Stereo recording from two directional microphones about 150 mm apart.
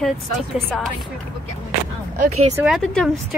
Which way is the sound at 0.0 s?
Centre (ahead or behind).